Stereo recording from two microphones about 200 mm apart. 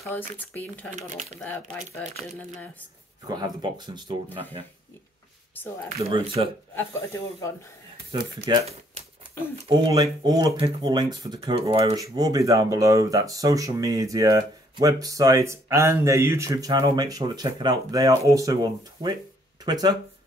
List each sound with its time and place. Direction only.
0.1 s speech: 10° left (ahead or behind)
0.9 s speech: 35° right (ahead or behind)
2.1 s speech: 10° left (ahead or behind)
3.3 s speech: 20° right (ahead or behind)
5.5 s speech: 10° left (ahead or behind)
5.9 s speech: 30° right (ahead or behind)
6.7 s speech: 10° left (ahead or behind)
8.5 s speech: 20° right (ahead or behind)
9.7 s speech: 20° right (ahead or behind)